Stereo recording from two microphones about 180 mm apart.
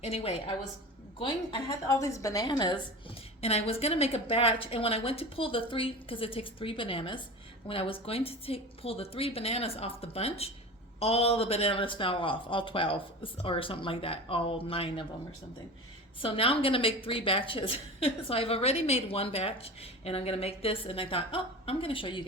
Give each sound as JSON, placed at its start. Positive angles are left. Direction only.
{"t": 0.0, "sound": "a woman's voice", "side_deg": 35}
{"t": 1.9, "sound": "a woman's voice", "side_deg": 15}
{"t": 3.4, "sound": "a woman's voice", "side_deg": 35}
{"t": 16.2, "sound": "a woman's voice", "side_deg": 30}